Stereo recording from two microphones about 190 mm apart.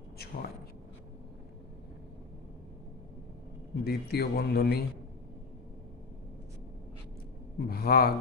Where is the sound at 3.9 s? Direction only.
55° left (ahead or behind).